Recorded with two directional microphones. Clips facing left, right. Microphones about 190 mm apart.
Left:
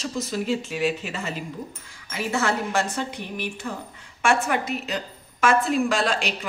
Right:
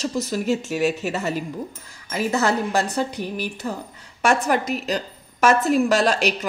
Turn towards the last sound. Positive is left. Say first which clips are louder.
# right 4 dB
turn(degrees=-40)  # may be behind; listen again after turning